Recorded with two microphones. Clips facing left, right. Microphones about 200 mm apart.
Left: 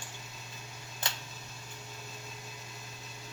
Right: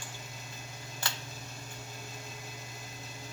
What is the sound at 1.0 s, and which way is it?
Tick, 20° left (ahead or behind).